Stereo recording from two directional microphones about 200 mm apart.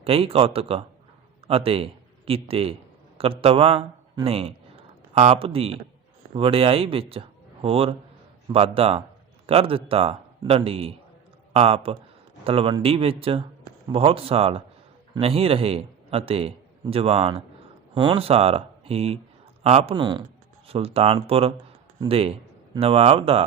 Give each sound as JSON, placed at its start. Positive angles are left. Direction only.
{"t": 0.0, "sound": "a man's voice", "side_deg": -30}